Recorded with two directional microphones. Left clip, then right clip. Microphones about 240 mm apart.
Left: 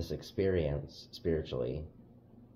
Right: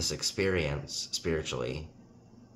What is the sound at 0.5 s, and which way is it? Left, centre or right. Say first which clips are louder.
Speech: right 2 dB; right.